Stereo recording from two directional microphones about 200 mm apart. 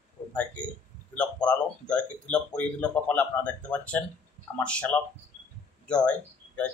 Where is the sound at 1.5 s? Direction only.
5° left (ahead or behind).